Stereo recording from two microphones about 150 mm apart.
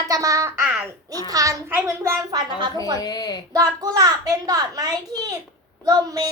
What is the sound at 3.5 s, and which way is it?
A child's voice, 25° right (ahead or behind).